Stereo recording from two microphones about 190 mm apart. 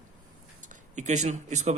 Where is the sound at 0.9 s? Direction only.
40° right (ahead or behind).